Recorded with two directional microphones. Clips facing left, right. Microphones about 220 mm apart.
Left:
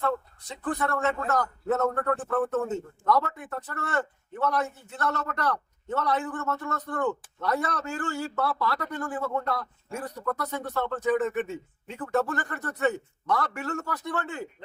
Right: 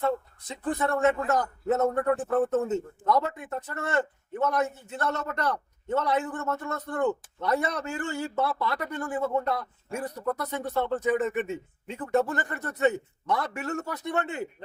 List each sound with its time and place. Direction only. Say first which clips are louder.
0.4 s a man's voice: right 2 dB; 20° right (ahead or behind)